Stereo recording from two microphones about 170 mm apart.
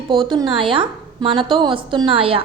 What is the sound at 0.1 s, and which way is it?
A woman's voice, 30° right (ahead or behind).